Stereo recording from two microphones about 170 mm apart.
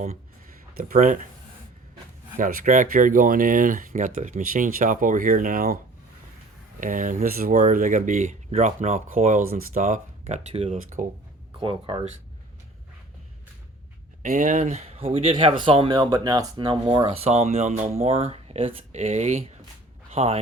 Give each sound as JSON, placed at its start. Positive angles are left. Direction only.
{"t": 0.8, "sound": "speech", "side_deg": -55}
{"t": 2.4, "sound": "speech", "side_deg": -50}
{"t": 6.7, "sound": "speech", "side_deg": -50}
{"t": 11.6, "sound": "speech", "side_deg": -30}
{"t": 14.2, "sound": "speech", "side_deg": -45}